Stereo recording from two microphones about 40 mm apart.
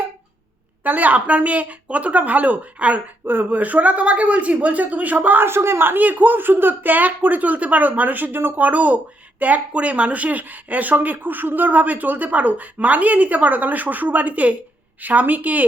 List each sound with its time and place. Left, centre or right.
0.9 s speech: right
3.2 s speech: right
3.6 s speech: right
5.4 s speech: right
6.0 s speech: right